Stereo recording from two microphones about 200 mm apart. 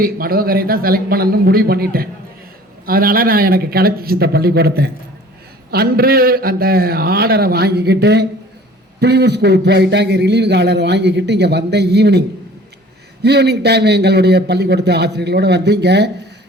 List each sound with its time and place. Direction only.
0.0 s a man's voice: 45° right (ahead or behind)
13.2 s a man's voice: 55° right (ahead or behind)